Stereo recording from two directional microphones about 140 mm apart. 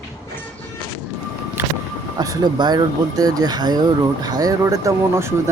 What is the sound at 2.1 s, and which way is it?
Speech, 25° right (ahead or behind).